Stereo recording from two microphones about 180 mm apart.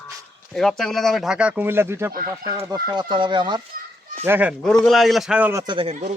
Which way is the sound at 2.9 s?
25° right (ahead or behind).